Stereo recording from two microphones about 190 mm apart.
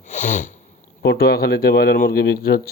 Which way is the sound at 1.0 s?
60° left (ahead or behind).